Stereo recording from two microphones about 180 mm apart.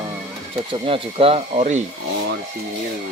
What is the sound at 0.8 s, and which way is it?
Speech, 30° right (ahead or behind).